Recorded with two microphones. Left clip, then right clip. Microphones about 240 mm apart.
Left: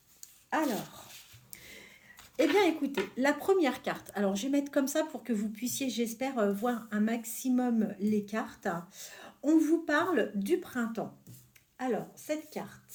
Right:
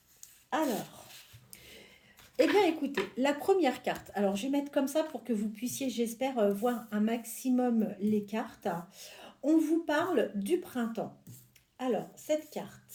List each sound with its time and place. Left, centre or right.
2.3 s speech: left